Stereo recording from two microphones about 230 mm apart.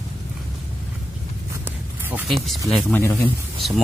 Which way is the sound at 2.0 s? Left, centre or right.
Centre.